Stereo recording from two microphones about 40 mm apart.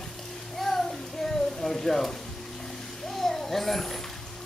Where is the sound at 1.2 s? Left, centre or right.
Centre.